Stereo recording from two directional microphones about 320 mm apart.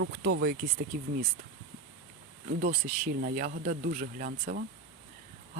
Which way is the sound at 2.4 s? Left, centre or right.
Right.